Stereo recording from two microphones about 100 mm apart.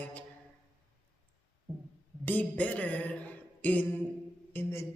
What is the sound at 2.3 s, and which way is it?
A woman's voice, 15° left (ahead or behind).